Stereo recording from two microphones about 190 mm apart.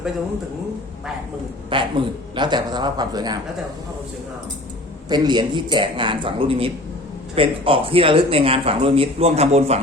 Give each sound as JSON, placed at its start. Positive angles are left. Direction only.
{"t": 1.7, "sound": "speech", "side_deg": -25}
{"t": 5.0, "sound": "speech", "side_deg": -20}